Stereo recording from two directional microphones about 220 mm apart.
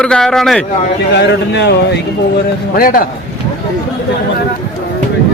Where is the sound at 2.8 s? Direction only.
40° left (ahead or behind).